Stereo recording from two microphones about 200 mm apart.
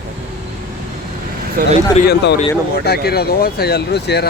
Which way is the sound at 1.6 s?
45° right (ahead or behind).